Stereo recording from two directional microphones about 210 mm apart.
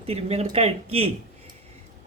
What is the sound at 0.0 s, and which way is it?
Speech, 30° right (ahead or behind).